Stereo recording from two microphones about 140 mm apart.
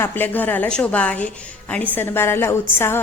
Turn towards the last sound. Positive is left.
turn(degrees=15)  # may be behind; listen again after turning